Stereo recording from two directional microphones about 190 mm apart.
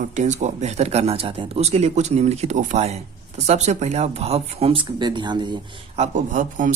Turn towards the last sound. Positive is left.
turn(degrees=-40)  # may be behind; listen again after turning